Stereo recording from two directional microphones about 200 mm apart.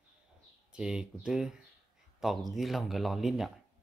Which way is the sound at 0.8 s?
5° right (ahead or behind).